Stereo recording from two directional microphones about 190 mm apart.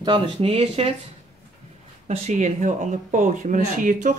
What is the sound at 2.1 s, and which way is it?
Speech, 40° right (ahead or behind).